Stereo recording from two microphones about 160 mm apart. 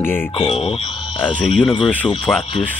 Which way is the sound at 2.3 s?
10° left (ahead or behind).